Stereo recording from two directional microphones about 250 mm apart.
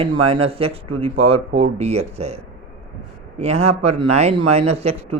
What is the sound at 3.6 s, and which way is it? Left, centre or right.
A man's voice, right.